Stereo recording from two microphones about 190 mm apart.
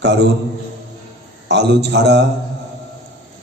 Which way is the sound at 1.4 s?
65° right (ahead or behind).